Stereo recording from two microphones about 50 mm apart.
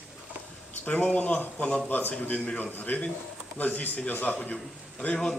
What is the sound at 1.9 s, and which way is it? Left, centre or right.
Speech, left.